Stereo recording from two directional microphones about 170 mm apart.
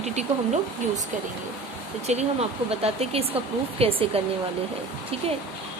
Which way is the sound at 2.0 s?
40° right (ahead or behind).